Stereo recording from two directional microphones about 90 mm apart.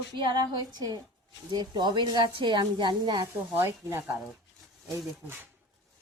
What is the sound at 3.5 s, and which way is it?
Speech, 25° right (ahead or behind).